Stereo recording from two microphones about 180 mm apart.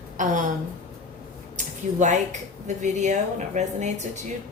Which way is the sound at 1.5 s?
45° right (ahead or behind).